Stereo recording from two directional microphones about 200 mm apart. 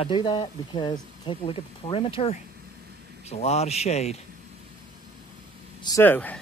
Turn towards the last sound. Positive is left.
turn(degrees=10)  # may be behind; listen again after turning